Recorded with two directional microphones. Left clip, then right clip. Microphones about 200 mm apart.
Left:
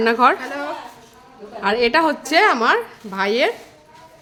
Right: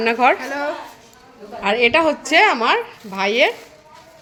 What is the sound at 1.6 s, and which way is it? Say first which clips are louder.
A woman's voice: right 1 dB; 15° left (ahead or behind).